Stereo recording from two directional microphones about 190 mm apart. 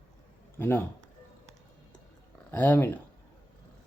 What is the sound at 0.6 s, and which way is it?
Speech, 10° left (ahead or behind).